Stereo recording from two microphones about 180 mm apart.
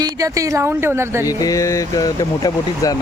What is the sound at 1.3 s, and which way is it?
Speech, 20° left (ahead or behind).